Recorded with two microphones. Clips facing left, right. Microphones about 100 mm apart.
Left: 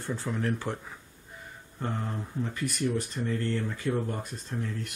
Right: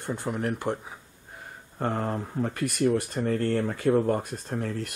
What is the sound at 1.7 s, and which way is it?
Speech, 55° right (ahead or behind).